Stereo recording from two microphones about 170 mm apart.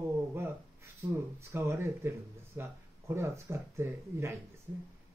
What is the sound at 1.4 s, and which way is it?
Speech, 15° right (ahead or behind).